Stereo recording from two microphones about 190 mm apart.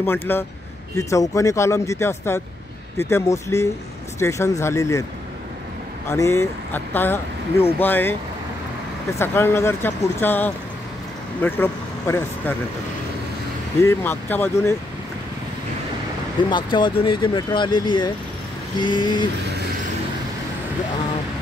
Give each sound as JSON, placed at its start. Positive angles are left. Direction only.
{"t": 0.0, "sound": "speech", "side_deg": 10}
{"t": 6.0, "sound": "speech", "side_deg": 15}
{"t": 9.2, "sound": "speech", "side_deg": 10}
{"t": 13.8, "sound": "speech", "side_deg": 10}
{"t": 16.4, "sound": "speech", "side_deg": 25}